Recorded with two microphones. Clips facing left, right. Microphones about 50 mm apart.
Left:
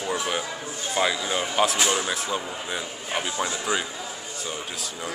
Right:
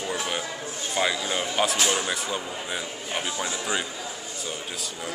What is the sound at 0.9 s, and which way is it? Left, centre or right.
Speech, centre.